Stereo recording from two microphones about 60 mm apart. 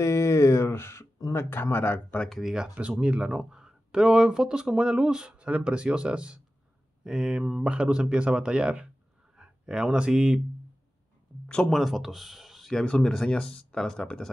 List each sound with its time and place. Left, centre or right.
0.0 s a sound: left
1.3 s speech: left
2.4 s speech: centre
11.4 s speech: centre
11.7 s speech: centre
12.8 s speech: centre